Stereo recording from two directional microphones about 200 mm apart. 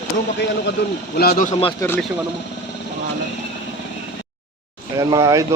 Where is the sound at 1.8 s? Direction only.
10° left (ahead or behind).